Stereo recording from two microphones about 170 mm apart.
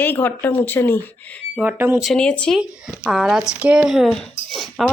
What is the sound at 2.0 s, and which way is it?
A woman's voice, 5° left (ahead or behind).